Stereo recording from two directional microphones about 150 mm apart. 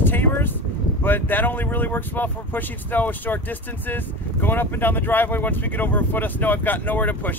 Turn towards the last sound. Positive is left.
turn(degrees=10)  # may be behind; listen again after turning